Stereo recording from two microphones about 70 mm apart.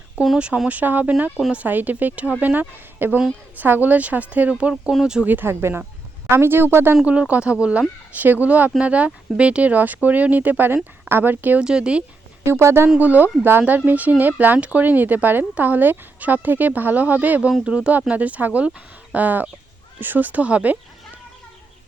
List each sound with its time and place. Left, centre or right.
0.3 s speech: centre
4.7 s speech: centre
5.2 s speech: right
6.9 s speech: centre
11.6 s speech: centre
12.5 s speech: right
13.0 s speech: right